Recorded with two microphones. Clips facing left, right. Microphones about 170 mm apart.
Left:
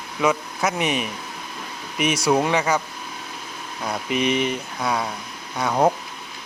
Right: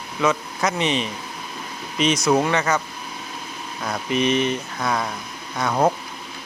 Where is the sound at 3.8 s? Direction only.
10° left (ahead or behind).